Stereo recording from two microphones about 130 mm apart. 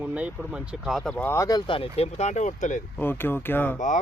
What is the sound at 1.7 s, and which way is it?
Speech, 45° left (ahead or behind).